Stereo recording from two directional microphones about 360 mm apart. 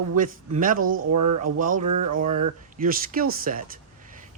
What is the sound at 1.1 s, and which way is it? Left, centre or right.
Speech, right.